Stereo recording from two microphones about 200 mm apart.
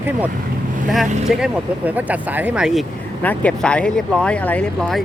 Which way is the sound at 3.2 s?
5° left (ahead or behind).